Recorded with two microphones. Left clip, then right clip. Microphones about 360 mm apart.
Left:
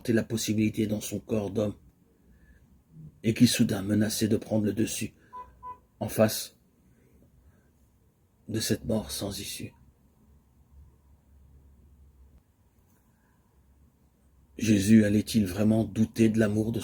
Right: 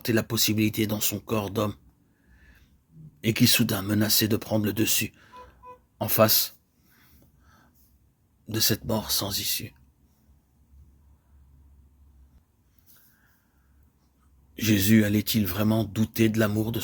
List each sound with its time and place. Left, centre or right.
0.0 s speech: right
3.2 s speech: right
8.4 s speech: right
14.5 s speech: right